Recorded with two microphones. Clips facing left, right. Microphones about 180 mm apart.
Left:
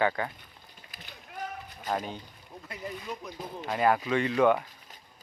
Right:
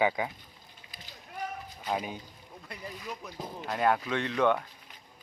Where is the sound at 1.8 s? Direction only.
10° right (ahead or behind).